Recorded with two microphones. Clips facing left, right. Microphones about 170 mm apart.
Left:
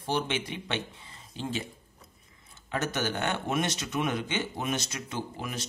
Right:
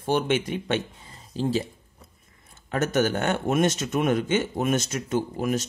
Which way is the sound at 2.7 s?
50° right (ahead or behind).